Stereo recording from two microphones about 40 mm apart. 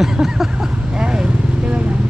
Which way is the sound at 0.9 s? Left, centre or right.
Right.